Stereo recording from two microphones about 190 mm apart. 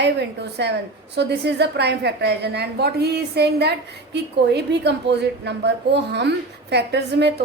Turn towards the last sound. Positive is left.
turn(degrees=-60)  # may be behind; listen again after turning